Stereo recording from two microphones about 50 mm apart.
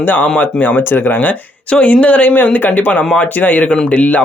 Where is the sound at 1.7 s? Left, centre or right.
Left.